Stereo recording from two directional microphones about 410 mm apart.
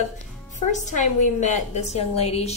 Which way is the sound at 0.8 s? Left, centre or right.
Centre.